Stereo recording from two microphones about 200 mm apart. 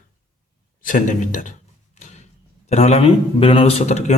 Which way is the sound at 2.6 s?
35° left (ahead or behind).